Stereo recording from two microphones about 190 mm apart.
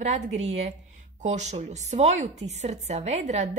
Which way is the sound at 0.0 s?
35° right (ahead or behind).